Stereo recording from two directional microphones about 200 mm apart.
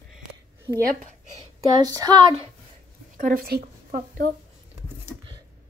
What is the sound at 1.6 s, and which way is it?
Speech, 20° right (ahead or behind).